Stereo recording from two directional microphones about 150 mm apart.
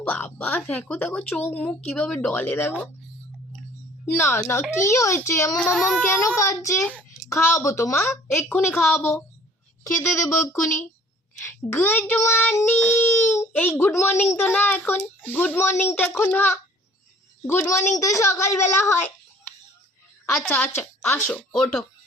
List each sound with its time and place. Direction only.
0.0 s child singing: 10° left (ahead or behind)
4.0 s child singing: 15° left (ahead or behind)
4.9 s speech: 20° left (ahead or behind)
5.7 s speech: centre (ahead or behind)
6.1 s speech: 20° left (ahead or behind)
7.3 s child singing: 20° left (ahead or behind)
9.8 s speech: 20° left (ahead or behind)
11.4 s child singing: 15° left (ahead or behind)
20.3 s child singing: 15° left (ahead or behind)